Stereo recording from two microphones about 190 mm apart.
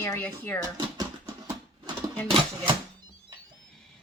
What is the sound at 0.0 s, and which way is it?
Speech, 10° left (ahead or behind).